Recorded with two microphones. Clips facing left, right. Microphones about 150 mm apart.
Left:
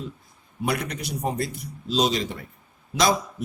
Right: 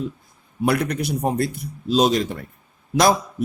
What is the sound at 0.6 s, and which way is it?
A man's voice, 55° right (ahead or behind).